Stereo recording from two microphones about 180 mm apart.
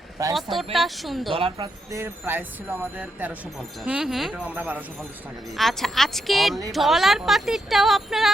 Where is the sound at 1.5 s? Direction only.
20° right (ahead or behind).